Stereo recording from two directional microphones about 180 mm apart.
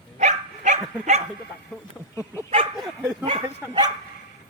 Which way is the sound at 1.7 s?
5° left (ahead or behind).